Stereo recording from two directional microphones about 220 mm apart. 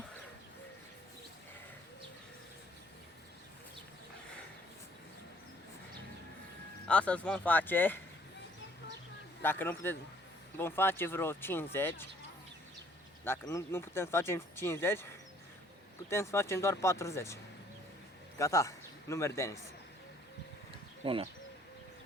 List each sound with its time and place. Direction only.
6.8 s speech: 5° left (ahead or behind)
9.4 s speech: 10° left (ahead or behind)
13.2 s speech: 10° left (ahead or behind)
16.0 s a man's voice: 10° left (ahead or behind)
21.0 s speech: 25° right (ahead or behind)